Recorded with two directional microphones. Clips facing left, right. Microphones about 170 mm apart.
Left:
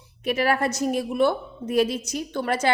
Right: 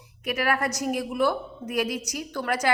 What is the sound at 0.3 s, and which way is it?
A woman's voice, 30° left (ahead or behind).